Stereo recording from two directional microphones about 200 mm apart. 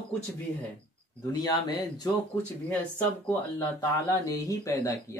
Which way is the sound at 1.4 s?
20° left (ahead or behind).